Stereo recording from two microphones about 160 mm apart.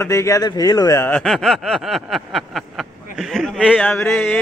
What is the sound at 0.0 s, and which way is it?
Speech, 20° left (ahead or behind).